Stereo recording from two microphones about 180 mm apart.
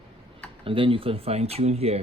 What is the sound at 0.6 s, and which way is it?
Speech, 30° right (ahead or behind).